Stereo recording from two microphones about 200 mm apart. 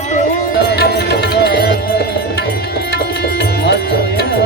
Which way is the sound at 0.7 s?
55° left (ahead or behind).